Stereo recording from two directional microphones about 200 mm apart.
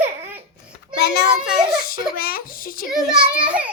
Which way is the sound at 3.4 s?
5° right (ahead or behind).